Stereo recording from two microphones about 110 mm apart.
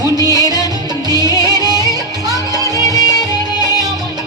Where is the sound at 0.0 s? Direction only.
35° right (ahead or behind).